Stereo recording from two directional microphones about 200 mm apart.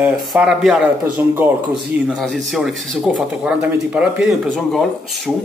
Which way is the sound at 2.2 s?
Centre (ahead or behind).